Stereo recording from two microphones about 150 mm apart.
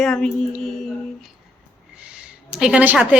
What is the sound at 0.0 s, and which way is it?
Speech, 5° left (ahead or behind).